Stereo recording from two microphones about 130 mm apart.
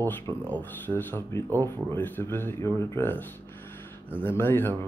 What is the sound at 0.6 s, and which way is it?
Speech, 15° left (ahead or behind).